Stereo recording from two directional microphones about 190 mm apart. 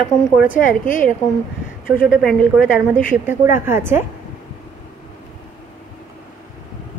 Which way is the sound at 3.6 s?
10° right (ahead or behind).